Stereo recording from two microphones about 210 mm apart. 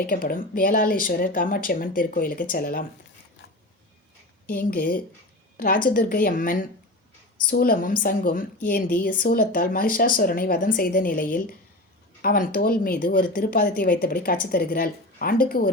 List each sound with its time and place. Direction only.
0.0 s speech: 45° left (ahead or behind)
4.4 s speech: 45° left (ahead or behind)